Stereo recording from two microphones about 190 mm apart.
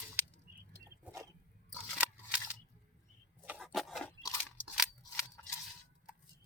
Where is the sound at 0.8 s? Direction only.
15° right (ahead or behind).